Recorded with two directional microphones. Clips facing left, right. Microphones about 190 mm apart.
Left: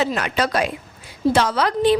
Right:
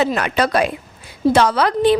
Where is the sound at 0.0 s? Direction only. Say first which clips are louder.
Right 3 dB; 60° right (ahead or behind).